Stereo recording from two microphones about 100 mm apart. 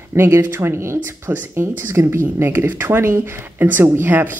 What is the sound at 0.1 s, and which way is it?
Speech, 25° right (ahead or behind).